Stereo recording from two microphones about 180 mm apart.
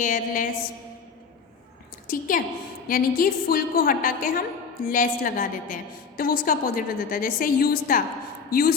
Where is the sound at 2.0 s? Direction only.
50° left (ahead or behind).